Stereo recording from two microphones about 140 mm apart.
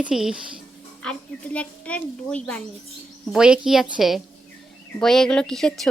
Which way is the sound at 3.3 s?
5° right (ahead or behind).